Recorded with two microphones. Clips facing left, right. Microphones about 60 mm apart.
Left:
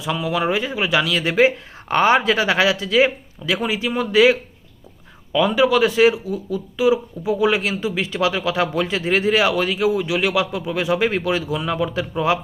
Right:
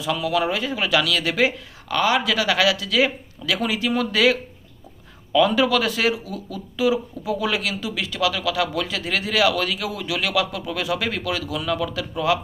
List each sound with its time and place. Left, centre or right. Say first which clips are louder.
0.0 s speech: left 1 dB; left